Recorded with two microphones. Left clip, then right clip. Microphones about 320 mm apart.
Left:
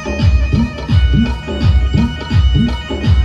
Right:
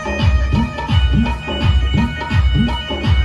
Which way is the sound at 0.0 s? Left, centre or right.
Right.